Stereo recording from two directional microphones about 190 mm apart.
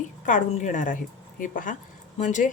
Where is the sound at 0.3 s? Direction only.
40° left (ahead or behind).